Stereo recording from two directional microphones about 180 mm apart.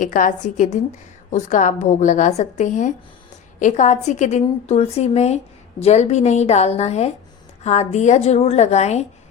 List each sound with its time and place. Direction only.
0.0 s a woman's voice: 45° left (ahead or behind)